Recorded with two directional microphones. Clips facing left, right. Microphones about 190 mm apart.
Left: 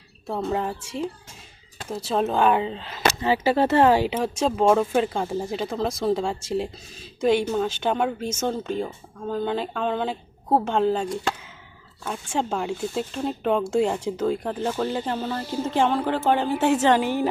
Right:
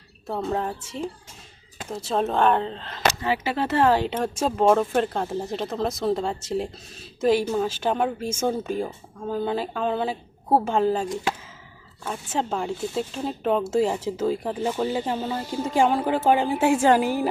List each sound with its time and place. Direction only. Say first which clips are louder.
0.3 s a woman's voice: left 1 dB; centre (ahead or behind)
3.2 s speech: left 5 dB; 30° left (ahead or behind)
3.8 s a woman's voice: right 2 dB; 15° left (ahead or behind); by 17.2 s 5° right (ahead or behind)